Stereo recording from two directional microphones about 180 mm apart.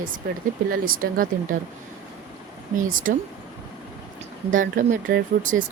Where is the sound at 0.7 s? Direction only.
55° right (ahead or behind).